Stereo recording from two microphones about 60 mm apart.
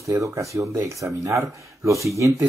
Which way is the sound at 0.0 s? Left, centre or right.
Right.